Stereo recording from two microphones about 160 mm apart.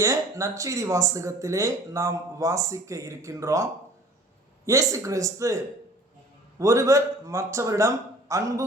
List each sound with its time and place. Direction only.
0.0 s speech: 20° right (ahead or behind)
6.6 s speech: 20° right (ahead or behind)